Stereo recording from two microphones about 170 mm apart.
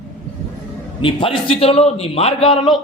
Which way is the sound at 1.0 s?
30° left (ahead or behind).